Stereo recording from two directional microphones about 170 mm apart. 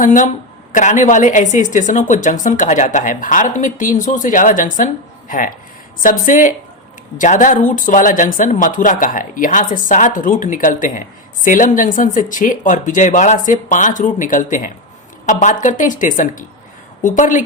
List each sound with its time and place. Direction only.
0.0 s speech: 50° left (ahead or behind)